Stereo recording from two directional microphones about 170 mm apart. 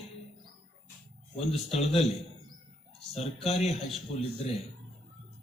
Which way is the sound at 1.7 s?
Centre (ahead or behind).